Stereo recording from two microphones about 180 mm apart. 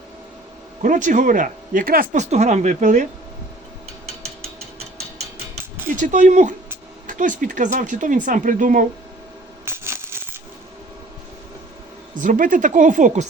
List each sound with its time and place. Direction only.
0.8 s speech: 45° right (ahead or behind)
2.3 s speech: 40° right (ahead or behind)
6.0 s speech: 45° right (ahead or behind)
9.6 s a sound: 15° right (ahead or behind)
12.1 s speech: 45° right (ahead or behind)